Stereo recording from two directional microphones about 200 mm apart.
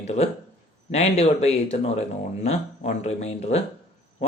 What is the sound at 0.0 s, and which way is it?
A man's voice, 35° left (ahead or behind).